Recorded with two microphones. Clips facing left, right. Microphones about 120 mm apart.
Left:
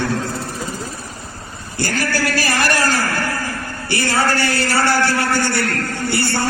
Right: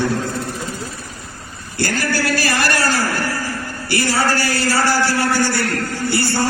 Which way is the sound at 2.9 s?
15° right (ahead or behind).